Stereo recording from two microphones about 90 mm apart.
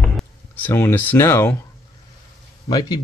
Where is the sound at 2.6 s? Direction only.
45° left (ahead or behind).